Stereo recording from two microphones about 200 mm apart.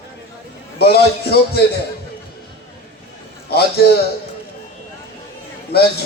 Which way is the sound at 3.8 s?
55° left (ahead or behind).